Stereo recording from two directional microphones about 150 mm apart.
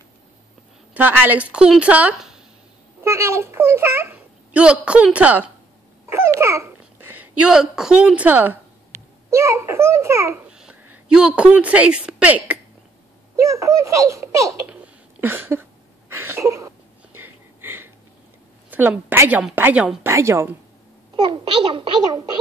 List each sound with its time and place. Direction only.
0.9 s a woman's voice: 10° right (ahead or behind)
3.0 s a child's voice: 20° right (ahead or behind)
6.0 s babbling: 15° right (ahead or behind)
7.4 s a woman's voice: 5° right (ahead or behind)
10.5 s speech: 5° right (ahead or behind)
13.4 s speech: 20° right (ahead or behind)
14.7 s a sound: 15° right (ahead or behind)
18.7 s a woman's voice: 10° right (ahead or behind)
21.2 s a child's voice: 30° right (ahead or behind)